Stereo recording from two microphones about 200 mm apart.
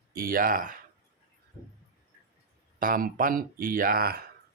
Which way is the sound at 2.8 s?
45° right (ahead or behind).